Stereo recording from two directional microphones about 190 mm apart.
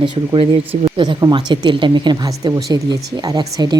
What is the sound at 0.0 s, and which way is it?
Speech, 25° right (ahead or behind).